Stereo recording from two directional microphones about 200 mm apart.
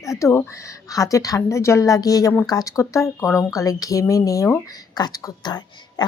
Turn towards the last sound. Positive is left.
turn(degrees=20)  # may be behind; listen again after turning